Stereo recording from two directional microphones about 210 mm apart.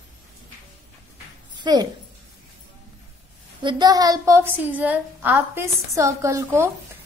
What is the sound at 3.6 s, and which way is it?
A woman's voice, 20° right (ahead or behind).